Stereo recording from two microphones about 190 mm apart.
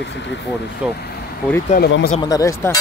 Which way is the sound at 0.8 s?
5° right (ahead or behind).